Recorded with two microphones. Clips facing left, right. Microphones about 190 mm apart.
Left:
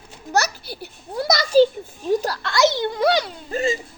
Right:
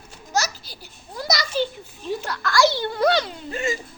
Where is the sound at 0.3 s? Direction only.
60° left (ahead or behind).